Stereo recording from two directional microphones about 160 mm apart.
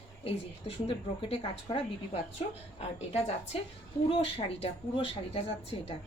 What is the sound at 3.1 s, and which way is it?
A woman's voice, 40° left (ahead or behind).